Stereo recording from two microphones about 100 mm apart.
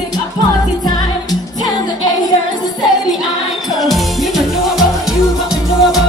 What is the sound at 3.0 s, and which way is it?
Music, centre (ahead or behind).